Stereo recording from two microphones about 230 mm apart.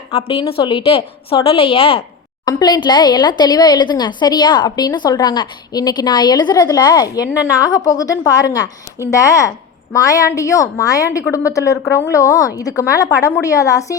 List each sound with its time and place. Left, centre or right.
0.1 s a woman's voice: left